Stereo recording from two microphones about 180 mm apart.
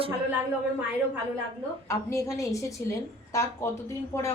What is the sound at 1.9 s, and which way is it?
Speech, 15° left (ahead or behind).